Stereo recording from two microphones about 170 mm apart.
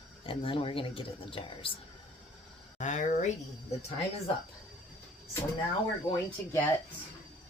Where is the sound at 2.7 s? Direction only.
45° left (ahead or behind).